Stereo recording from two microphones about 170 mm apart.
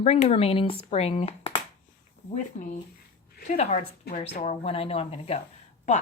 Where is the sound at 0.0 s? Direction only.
40° left (ahead or behind).